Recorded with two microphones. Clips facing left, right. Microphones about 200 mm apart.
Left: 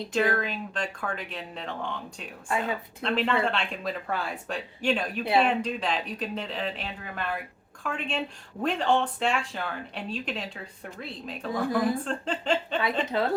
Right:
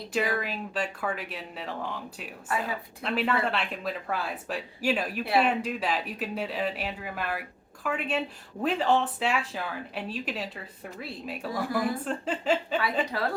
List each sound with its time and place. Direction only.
0.1 s speech: 5° right (ahead or behind)
13.1 s a woman's voice: 20° left (ahead or behind)